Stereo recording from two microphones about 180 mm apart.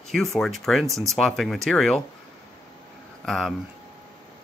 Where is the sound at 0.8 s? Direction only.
15° right (ahead or behind).